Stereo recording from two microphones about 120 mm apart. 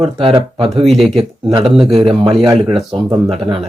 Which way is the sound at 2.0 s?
50° right (ahead or behind).